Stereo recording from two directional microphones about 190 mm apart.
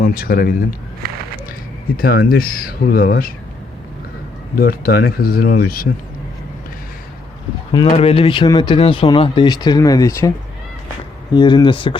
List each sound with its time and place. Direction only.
0.0 s speech: 50° left (ahead or behind)
2.0 s speech: 50° left (ahead or behind)
4.5 s speech: 50° left (ahead or behind)
7.7 s speech: 30° left (ahead or behind)
11.3 s speech: 25° left (ahead or behind)